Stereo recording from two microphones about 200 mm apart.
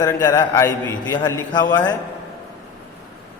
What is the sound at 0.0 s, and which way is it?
A man's voice, 20° left (ahead or behind).